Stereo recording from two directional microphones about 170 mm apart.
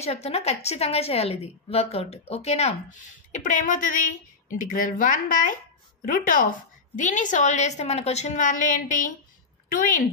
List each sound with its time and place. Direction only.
0.0 s a woman's voice: 40° left (ahead or behind); by 10.0 s 55° left (ahead or behind)